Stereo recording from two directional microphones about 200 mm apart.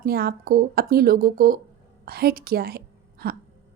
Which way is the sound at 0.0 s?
50° right (ahead or behind).